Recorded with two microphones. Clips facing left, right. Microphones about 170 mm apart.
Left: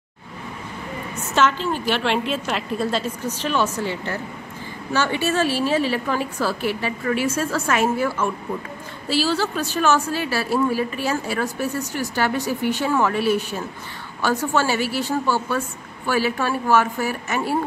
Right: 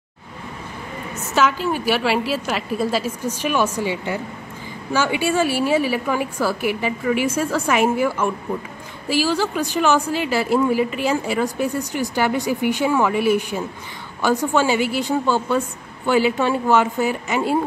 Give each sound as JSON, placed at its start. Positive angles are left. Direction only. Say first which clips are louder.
{"t": 1.3, "sound": "speech", "louder": "right 1 dB", "side_deg": -10}